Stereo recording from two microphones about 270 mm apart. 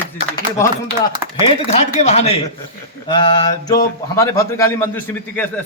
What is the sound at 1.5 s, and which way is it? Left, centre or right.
A man's voice, left.